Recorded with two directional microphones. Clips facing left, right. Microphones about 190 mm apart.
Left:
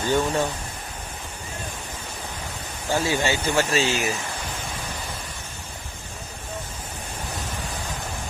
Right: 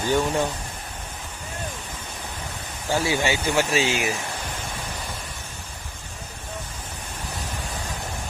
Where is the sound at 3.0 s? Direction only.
15° right (ahead or behind).